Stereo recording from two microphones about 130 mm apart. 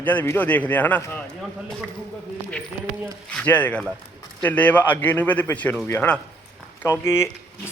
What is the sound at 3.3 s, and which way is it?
A man's voice, 10° left (ahead or behind).